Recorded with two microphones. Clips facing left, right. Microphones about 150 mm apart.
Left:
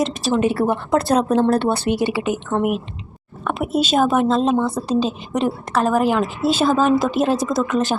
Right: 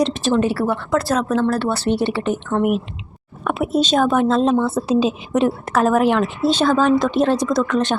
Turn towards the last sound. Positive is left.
turn(degrees=0)  # may be behind; listen again after turning